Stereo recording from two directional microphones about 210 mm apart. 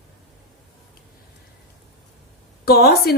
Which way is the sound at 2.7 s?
50° left (ahead or behind).